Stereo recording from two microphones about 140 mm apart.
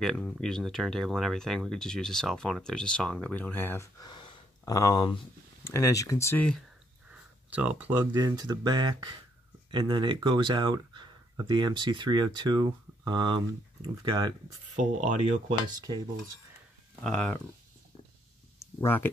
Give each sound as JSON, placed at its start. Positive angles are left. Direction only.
{"t": 0.0, "sound": "speech", "side_deg": 5}
{"t": 4.0, "sound": "gasp", "side_deg": 35}
{"t": 4.7, "sound": "speech", "side_deg": 25}
{"t": 7.1, "sound": "a sound", "side_deg": -10}
{"t": 8.3, "sound": "speech", "side_deg": -30}
{"t": 14.8, "sound": "speech", "side_deg": -60}
{"t": 15.8, "sound": "cutlery", "side_deg": -25}
{"t": 17.0, "sound": "speech", "side_deg": 5}
{"t": 18.6, "sound": "a sound", "side_deg": 15}